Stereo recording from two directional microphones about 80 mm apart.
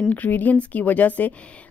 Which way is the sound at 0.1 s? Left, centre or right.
Left.